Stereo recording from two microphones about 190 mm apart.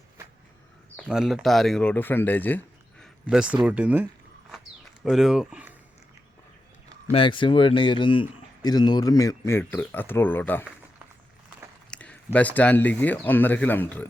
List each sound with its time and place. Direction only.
0.9 s speech: 5° right (ahead or behind)
3.2 s speech: 5° right (ahead or behind)
7.1 s speech: 25° left (ahead or behind); by 10.7 s 10° left (ahead or behind)
11.9 s speech: 5° left (ahead or behind)